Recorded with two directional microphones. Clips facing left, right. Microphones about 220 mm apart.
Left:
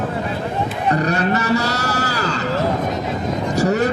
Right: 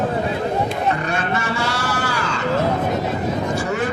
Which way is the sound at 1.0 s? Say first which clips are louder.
Left 4 dB; 40° left (ahead or behind).